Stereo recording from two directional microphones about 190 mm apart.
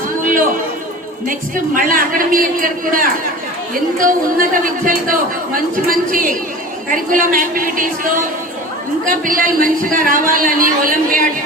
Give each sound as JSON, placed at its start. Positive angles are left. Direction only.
{"t": 1.3, "sound": "a man's voice", "side_deg": -45}
{"t": 9.0, "sound": "a man's voice", "side_deg": -45}